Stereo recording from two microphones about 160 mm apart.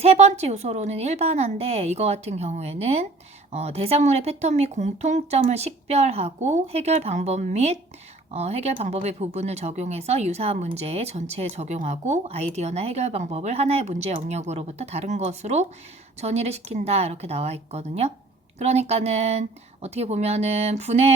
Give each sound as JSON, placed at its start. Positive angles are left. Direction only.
{"t": 0.0, "sound": "speech", "side_deg": -40}